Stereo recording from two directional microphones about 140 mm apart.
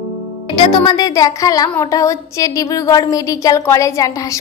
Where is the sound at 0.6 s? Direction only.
30° left (ahead or behind).